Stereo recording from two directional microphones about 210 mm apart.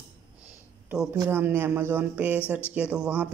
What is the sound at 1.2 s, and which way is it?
Speech, 10° right (ahead or behind).